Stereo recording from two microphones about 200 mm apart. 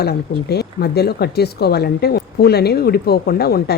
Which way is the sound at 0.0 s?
55° left (ahead or behind).